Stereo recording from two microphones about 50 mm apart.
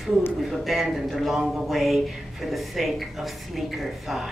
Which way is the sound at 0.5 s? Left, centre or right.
Centre.